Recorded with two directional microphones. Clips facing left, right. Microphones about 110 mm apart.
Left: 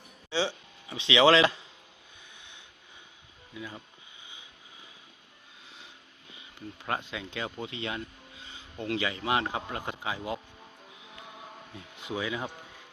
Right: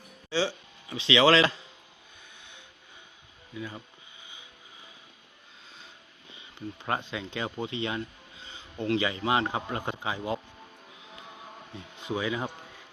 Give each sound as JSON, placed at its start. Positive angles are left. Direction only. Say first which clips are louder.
{"t": 0.3, "sound": "speech", "louder": "right 1 dB", "side_deg": 20}
{"t": 6.3, "sound": "a man's voice", "louder": "right 4 dB", "side_deg": 0}
{"t": 11.7, "sound": "a man's voice", "louder": "right 3 dB", "side_deg": 5}